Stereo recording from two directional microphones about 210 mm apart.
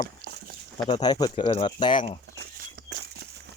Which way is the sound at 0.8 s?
20° left (ahead or behind).